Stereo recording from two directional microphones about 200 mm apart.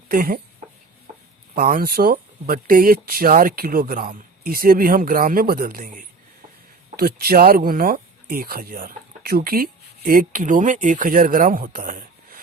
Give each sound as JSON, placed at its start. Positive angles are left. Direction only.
{"t": 0.1, "sound": "speech", "side_deg": -45}
{"t": 1.5, "sound": "speech", "side_deg": -45}